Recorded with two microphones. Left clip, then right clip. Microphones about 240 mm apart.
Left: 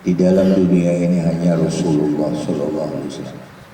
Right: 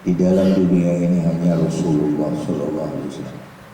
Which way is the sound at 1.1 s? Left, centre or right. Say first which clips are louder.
Left 2 dB; left.